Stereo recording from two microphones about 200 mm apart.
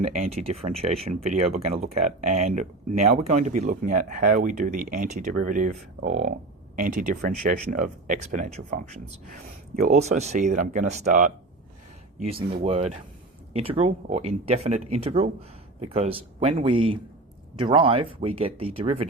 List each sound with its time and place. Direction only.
0.0 s speech: 30° right (ahead or behind)
12.6 s speech: 30° right (ahead or behind)